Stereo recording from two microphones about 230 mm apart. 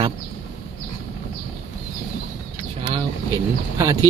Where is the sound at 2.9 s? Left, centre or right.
Centre.